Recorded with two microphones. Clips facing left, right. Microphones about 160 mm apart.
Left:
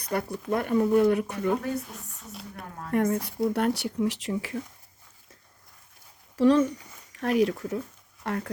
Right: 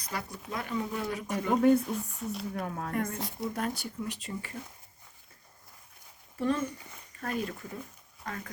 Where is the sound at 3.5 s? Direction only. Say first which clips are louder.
Left 8 dB; 70° left (ahead or behind).